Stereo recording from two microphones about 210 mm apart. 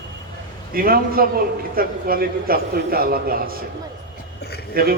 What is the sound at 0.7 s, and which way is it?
A man's voice, 45° right (ahead or behind).